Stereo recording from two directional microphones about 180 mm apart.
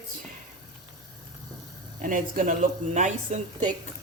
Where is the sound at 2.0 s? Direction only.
50° right (ahead or behind).